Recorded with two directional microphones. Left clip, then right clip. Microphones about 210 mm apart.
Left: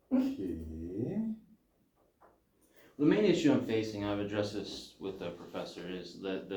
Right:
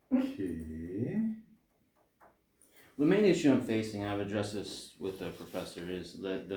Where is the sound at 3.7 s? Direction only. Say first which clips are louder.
Left 1 dB; 45° right (ahead or behind).